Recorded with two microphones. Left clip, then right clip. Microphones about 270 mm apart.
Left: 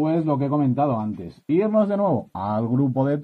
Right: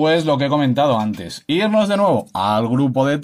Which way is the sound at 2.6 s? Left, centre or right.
Centre.